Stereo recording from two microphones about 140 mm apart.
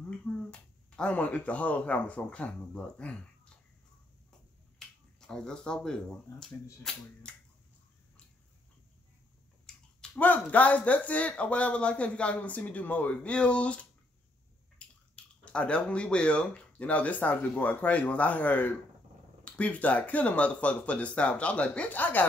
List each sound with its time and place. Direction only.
0.2 s speech: 5° left (ahead or behind)
4.7 s finger snapping: 5° left (ahead or behind)
6.3 s speech: 25° left (ahead or behind)
6.8 s speech: 5° left (ahead or behind)
9.7 s a sound: 5° left (ahead or behind)
10.1 s speech: 10° left (ahead or behind)
14.8 s a sound: 10° left (ahead or behind)
15.1 s speech: 10° left (ahead or behind)